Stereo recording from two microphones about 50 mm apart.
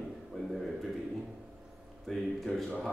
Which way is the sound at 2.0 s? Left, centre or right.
Centre.